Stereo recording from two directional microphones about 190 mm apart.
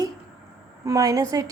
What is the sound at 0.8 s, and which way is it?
Speech, 15° right (ahead or behind).